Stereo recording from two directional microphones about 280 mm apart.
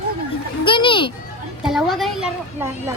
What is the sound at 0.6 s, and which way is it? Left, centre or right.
Music, centre.